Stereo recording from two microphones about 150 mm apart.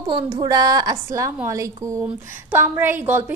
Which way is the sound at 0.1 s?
30° right (ahead or behind).